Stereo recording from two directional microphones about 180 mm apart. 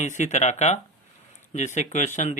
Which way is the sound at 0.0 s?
40° left (ahead or behind).